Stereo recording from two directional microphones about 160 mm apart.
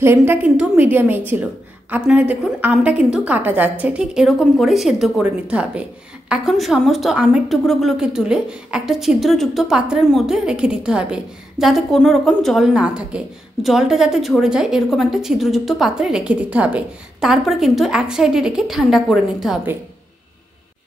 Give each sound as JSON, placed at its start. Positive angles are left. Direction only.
{"t": 0.0, "sound": "a woman's voice", "side_deg": -15}